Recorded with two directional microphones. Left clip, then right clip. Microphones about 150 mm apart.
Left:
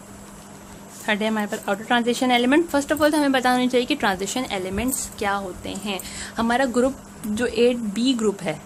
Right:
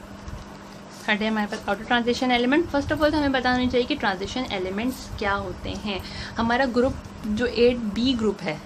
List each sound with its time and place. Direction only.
1.0 s speech: 35° left (ahead or behind)